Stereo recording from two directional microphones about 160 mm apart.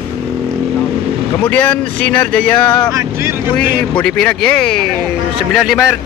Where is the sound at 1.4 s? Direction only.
10° left (ahead or behind).